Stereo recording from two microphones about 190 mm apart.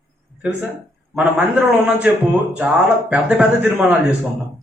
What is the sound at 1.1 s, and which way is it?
A man's voice, 5° right (ahead or behind).